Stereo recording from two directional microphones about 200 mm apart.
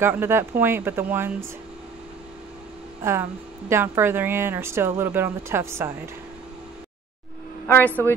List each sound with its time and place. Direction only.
0.0 s speech: 10° right (ahead or behind)
3.0 s speech: 10° right (ahead or behind)
7.6 s speech: 10° left (ahead or behind)